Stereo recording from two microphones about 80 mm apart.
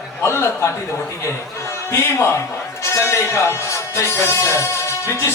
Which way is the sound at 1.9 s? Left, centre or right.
Left.